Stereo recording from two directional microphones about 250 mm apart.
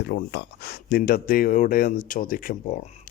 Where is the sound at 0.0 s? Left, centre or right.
Left.